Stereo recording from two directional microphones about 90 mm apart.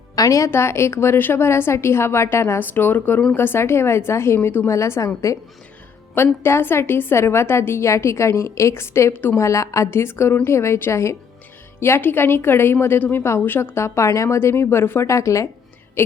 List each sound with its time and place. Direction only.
0.2 s a woman's voice: 40° left (ahead or behind)
6.1 s a woman's voice: 25° left (ahead or behind)
9.4 s a woman's voice: 35° left (ahead or behind)